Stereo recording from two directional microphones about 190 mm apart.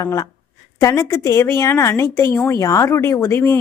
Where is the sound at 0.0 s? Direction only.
15° left (ahead or behind).